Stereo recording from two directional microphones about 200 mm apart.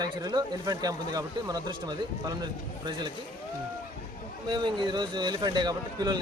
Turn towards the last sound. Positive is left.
turn(degrees=-20)  # may be behind; listen again after turning